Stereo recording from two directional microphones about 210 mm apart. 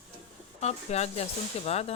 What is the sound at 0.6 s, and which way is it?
Speech, 30° left (ahead or behind).